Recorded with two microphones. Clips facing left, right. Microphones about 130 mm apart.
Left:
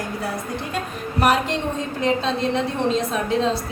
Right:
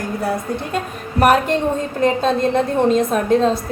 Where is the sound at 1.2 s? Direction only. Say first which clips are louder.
Right 5 dB; 50° right (ahead or behind).